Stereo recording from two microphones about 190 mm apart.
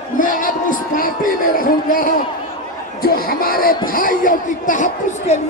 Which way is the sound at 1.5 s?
45° left (ahead or behind).